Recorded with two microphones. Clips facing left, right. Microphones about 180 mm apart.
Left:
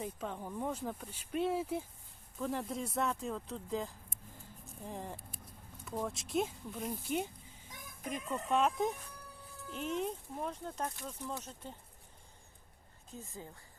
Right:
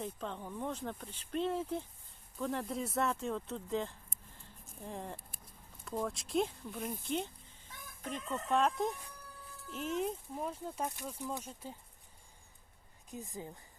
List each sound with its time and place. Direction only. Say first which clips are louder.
0.0 s speech: left 1 dB; 5° left (ahead or behind); by 11.7 s 10° right (ahead or behind)
13.1 s speech: right 3 dB; 15° right (ahead or behind)